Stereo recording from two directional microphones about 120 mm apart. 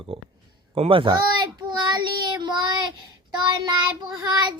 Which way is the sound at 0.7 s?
50° right (ahead or behind).